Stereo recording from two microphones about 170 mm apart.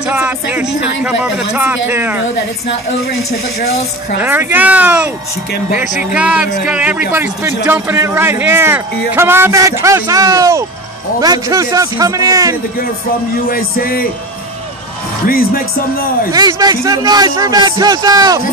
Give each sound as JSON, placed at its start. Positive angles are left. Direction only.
{"t": 0.0, "sound": "a man's voice", "side_deg": -10}
{"t": 4.2, "sound": "a man's voice", "side_deg": -10}
{"t": 13.5, "sound": "music", "side_deg": 60}
{"t": 15.2, "sound": "music", "side_deg": 60}
{"t": 16.3, "sound": "a man's voice", "side_deg": -20}